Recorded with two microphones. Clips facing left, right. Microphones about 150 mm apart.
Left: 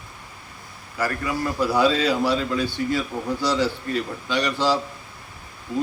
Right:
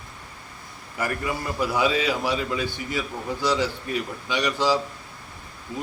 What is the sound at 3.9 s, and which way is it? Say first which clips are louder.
Speech: left 2 dB; 15° right (ahead or behind).